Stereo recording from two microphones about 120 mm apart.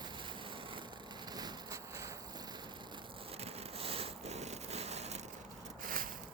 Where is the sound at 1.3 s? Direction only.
30° right (ahead or behind).